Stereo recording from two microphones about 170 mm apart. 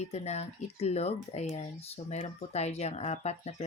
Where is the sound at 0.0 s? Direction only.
40° left (ahead or behind).